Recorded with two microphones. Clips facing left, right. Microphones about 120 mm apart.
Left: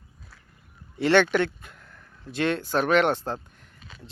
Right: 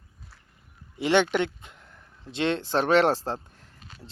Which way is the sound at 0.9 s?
15° right (ahead or behind).